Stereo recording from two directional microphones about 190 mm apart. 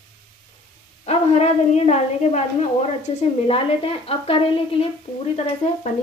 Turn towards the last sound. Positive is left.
turn(degrees=35)  # may be behind; listen again after turning